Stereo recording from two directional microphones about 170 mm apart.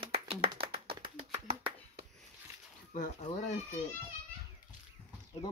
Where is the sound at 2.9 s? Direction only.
50° left (ahead or behind).